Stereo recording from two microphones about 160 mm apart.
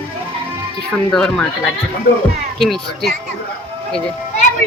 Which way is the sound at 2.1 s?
65° left (ahead or behind).